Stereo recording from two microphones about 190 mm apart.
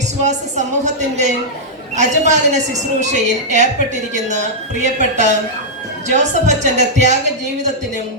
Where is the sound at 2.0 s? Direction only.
40° right (ahead or behind).